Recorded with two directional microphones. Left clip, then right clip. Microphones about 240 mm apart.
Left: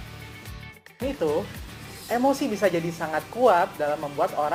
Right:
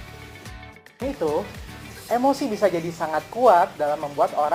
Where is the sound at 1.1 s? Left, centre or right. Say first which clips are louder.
Right 1 dB; centre.